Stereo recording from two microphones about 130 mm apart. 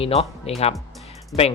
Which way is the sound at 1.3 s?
Centre (ahead or behind).